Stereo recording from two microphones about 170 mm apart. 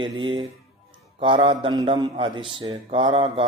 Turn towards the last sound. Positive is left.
turn(degrees=-30)  # may be behind; listen again after turning